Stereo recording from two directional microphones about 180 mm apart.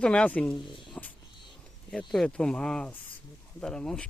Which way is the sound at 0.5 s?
25° left (ahead or behind).